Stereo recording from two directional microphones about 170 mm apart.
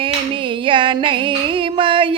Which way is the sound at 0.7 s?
30° right (ahead or behind).